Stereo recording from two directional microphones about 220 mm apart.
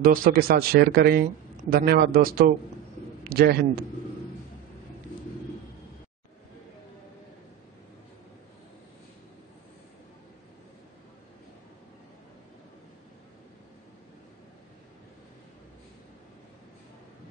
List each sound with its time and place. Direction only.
0.0 s a man's voice: 40° right (ahead or behind)